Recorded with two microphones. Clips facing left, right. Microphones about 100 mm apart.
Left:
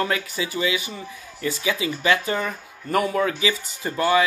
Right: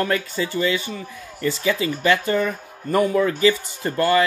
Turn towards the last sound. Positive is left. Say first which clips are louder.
# right 2 dB
turn(degrees=5)  # may be behind; listen again after turning